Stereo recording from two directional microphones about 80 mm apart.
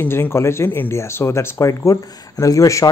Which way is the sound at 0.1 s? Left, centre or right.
Left.